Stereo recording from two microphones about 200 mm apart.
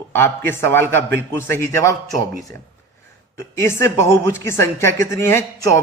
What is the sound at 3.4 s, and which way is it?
Speech, 10° left (ahead or behind).